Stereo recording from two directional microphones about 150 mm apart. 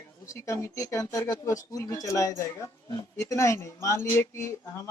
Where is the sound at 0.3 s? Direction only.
20° left (ahead or behind).